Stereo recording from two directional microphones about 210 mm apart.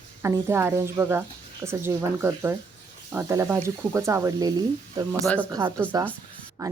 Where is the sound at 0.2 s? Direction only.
15° right (ahead or behind).